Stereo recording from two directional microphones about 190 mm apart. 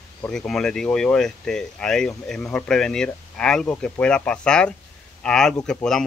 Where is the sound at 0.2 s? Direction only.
5° left (ahead or behind).